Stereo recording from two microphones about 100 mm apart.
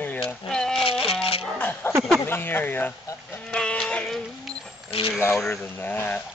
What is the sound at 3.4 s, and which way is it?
Sheep, 10° left (ahead or behind).